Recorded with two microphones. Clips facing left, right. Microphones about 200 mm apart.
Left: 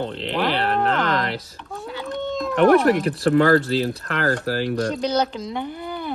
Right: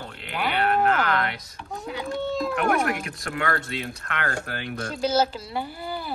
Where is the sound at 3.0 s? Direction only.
35° left (ahead or behind).